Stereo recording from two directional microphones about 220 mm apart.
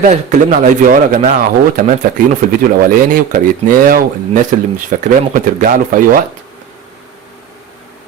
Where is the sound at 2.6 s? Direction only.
40° right (ahead or behind).